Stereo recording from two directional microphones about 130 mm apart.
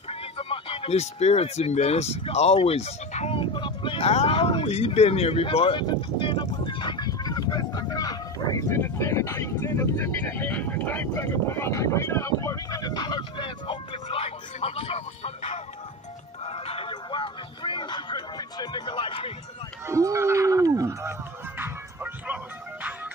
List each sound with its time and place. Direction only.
0.4 s speech: 45° left (ahead or behind)
3.3 s speech: 40° left (ahead or behind)
16.6 s music: 45° left (ahead or behind)
19.9 s speech: 25° right (ahead or behind)
21.5 s music: 15° right (ahead or behind)